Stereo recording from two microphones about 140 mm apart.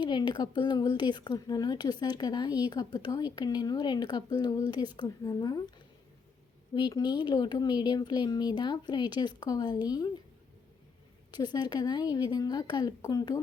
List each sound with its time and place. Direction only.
0.0 s speech: 30° left (ahead or behind)
6.7 s speech: 30° left (ahead or behind)
11.3 s speech: 30° left (ahead or behind)